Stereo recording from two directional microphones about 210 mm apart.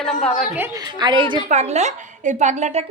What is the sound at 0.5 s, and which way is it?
A woman's voice, 15° right (ahead or behind).